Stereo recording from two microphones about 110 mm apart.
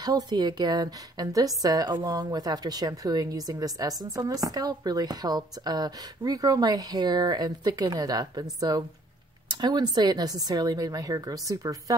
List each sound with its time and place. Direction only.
0.0 s a woman's voice: 35° right (ahead or behind)